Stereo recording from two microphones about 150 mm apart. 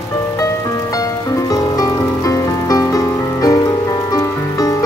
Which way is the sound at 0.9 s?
25° left (ahead or behind).